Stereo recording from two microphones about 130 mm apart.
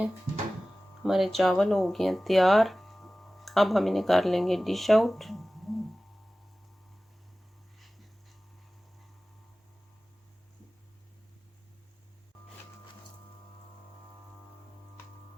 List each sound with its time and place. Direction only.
1.0 s speech: centre (ahead or behind)